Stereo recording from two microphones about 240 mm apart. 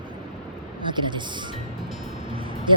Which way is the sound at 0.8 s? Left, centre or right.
Centre.